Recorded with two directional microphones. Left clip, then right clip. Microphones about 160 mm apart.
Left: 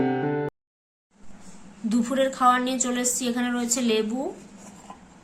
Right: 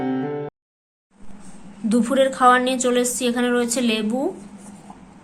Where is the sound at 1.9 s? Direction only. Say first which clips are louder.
Right 6 dB; centre (ahead or behind).